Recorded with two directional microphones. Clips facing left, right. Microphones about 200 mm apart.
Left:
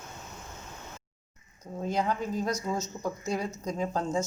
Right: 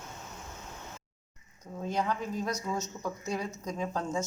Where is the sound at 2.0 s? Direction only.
35° left (ahead or behind).